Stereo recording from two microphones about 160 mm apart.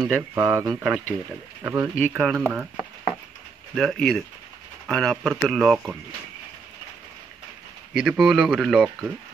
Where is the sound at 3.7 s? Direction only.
5° left (ahead or behind).